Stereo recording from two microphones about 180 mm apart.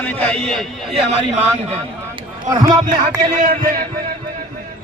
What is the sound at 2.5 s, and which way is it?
Music, 20° right (ahead or behind).